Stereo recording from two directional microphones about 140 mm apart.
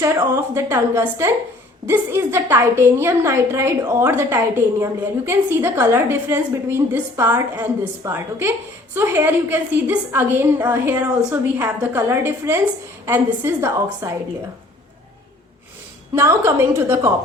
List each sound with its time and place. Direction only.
0.0 s a woman's voice: 20° right (ahead or behind)
16.1 s a woman's voice: 20° right (ahead or behind)